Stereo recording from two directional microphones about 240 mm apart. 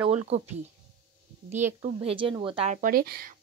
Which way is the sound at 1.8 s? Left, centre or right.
Right.